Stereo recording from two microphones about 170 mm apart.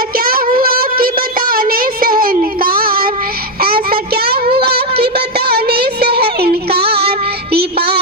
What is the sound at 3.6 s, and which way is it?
Child singing, 65° right (ahead or behind).